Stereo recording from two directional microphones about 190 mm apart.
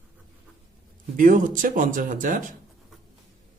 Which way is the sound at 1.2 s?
45° right (ahead or behind).